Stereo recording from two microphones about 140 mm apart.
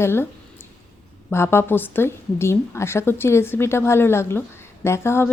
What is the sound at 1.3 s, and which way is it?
Speech, 15° left (ahead or behind).